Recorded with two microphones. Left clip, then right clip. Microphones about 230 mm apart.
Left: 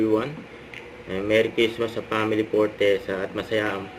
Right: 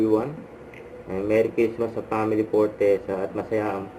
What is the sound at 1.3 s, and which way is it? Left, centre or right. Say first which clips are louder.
Speech: left 1 dB; left.